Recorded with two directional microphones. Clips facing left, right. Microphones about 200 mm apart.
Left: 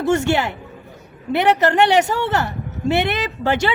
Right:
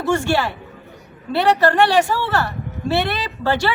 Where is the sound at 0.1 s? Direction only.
20° left (ahead or behind).